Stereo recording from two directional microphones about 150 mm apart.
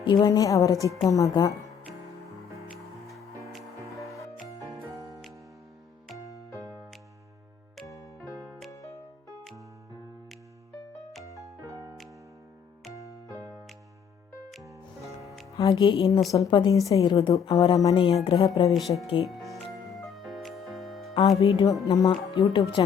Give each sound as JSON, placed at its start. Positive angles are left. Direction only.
{"t": 0.0, "sound": "speech", "side_deg": 30}
{"t": 6.2, "sound": "music", "side_deg": 20}
{"t": 7.9, "sound": "music", "side_deg": 20}
{"t": 8.2, "sound": "music", "side_deg": 5}
{"t": 8.7, "sound": "music", "side_deg": 20}
{"t": 15.0, "sound": "music", "side_deg": 0}
{"t": 15.5, "sound": "speech", "side_deg": 25}
{"t": 18.7, "sound": "speech", "side_deg": 0}
{"t": 19.0, "sound": "speech", "side_deg": 35}
{"t": 19.4, "sound": "music", "side_deg": 0}
{"t": 21.2, "sound": "speech", "side_deg": 35}